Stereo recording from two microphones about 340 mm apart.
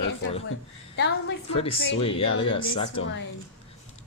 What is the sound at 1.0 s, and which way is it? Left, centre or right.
Speech, left.